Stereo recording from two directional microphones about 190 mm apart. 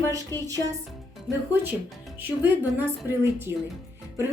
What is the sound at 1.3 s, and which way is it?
A woman's voice, centre (ahead or behind).